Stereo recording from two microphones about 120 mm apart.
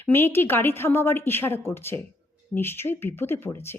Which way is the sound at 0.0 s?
20° left (ahead or behind).